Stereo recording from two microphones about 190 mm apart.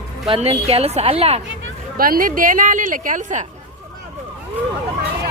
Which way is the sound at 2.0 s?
50° right (ahead or behind).